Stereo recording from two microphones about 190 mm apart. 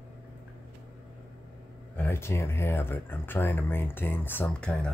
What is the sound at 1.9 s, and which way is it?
Speech, 15° left (ahead or behind).